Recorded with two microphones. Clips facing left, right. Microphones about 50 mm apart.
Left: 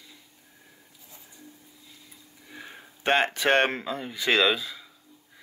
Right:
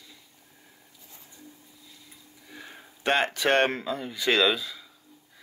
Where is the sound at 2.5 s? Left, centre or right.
Left.